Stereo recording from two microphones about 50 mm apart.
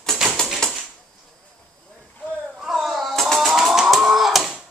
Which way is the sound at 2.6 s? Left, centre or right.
Centre.